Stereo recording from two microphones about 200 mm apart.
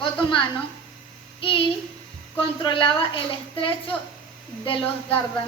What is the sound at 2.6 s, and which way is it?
A woman's voice, 25° left (ahead or behind).